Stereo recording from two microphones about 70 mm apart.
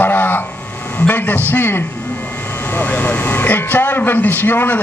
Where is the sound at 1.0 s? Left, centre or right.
Left.